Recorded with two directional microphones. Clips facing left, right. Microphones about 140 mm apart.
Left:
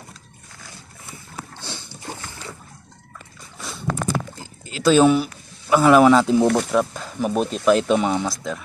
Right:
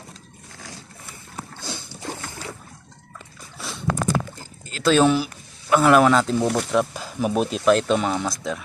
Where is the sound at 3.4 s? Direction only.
Centre (ahead or behind).